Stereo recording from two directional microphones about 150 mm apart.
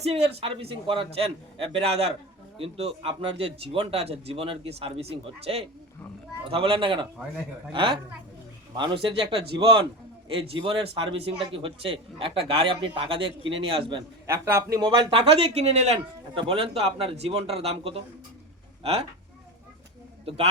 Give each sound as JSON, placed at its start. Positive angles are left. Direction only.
{"t": 0.0, "sound": "speech", "side_deg": -45}
{"t": 14.3, "sound": "a man's voice", "side_deg": -15}
{"t": 14.8, "sound": "speech", "side_deg": -35}
{"t": 20.2, "sound": "speech", "side_deg": -40}